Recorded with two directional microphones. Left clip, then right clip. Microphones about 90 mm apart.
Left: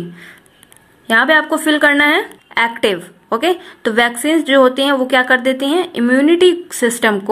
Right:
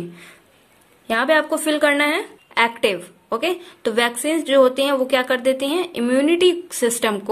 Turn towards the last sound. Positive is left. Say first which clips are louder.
# left 5 dB
turn(degrees=-20)  # may be behind; listen again after turning